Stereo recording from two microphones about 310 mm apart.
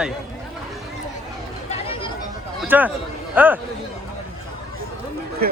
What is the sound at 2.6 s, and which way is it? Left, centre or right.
Speech, centre.